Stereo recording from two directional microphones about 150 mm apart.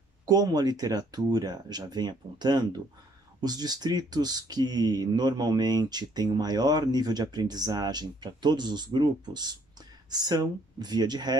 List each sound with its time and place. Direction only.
0.3 s speech: 25° right (ahead or behind)